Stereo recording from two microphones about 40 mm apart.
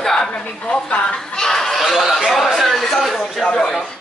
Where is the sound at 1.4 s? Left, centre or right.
Centre.